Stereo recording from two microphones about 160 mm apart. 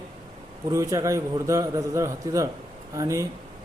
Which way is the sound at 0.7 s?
20° right (ahead or behind).